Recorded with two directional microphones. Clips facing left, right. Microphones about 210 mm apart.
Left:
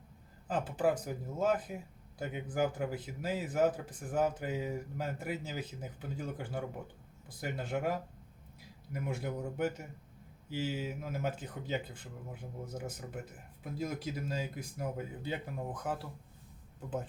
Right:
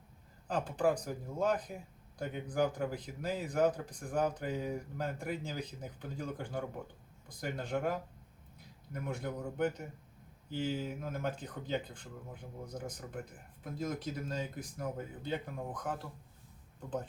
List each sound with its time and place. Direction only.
0.4 s speech: 5° left (ahead or behind)